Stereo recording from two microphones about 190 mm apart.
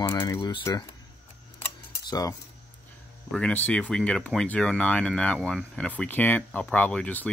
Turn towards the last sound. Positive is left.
turn(degrees=5)  # may be behind; listen again after turning